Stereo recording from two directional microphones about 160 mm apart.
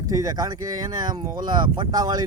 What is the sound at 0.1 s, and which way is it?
Speech, 25° right (ahead or behind).